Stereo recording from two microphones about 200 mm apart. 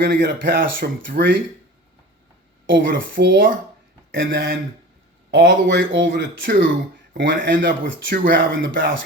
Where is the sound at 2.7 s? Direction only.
55° right (ahead or behind).